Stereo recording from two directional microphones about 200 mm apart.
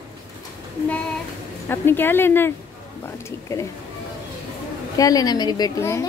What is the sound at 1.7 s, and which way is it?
Speech, 10° left (ahead or behind).